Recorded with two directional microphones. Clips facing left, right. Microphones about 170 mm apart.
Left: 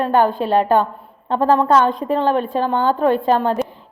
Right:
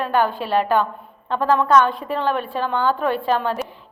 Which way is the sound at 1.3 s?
35° left (ahead or behind).